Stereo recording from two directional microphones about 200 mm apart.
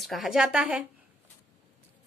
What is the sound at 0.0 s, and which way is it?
Speech, centre (ahead or behind).